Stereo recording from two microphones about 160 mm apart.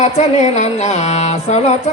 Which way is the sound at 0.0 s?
45° left (ahead or behind).